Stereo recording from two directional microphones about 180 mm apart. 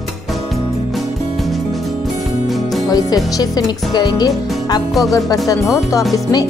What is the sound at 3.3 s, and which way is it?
Speech, 20° left (ahead or behind).